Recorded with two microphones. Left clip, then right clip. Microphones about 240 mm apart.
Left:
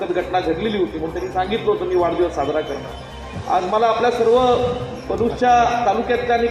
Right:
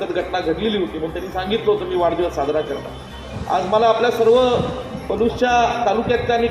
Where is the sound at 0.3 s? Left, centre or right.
Right.